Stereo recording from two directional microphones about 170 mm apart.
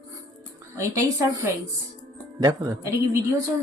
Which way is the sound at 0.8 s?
20° right (ahead or behind).